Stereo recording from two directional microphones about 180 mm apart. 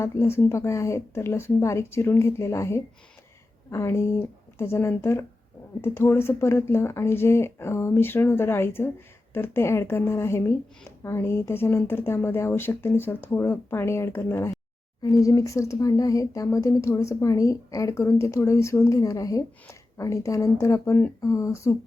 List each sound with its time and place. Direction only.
0.0 s speech: 15° left (ahead or behind)